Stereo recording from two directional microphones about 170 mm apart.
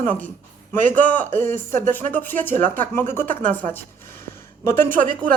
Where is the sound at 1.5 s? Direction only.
50° right (ahead or behind).